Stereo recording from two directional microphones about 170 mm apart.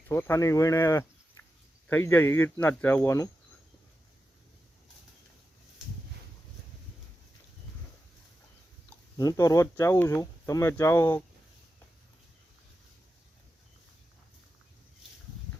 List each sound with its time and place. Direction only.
0.1 s speech: 15° left (ahead or behind)
1.4 s cricket: 15° left (ahead or behind)
1.9 s speech: 10° left (ahead or behind)
9.1 s speech: 20° left (ahead or behind)